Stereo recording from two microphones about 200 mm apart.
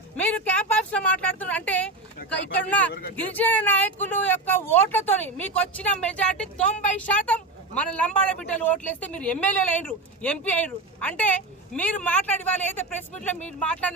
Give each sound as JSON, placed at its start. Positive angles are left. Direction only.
{"t": 0.3, "sound": "speech", "side_deg": 5}